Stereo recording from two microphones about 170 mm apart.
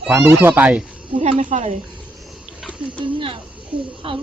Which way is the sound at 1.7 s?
30° right (ahead or behind).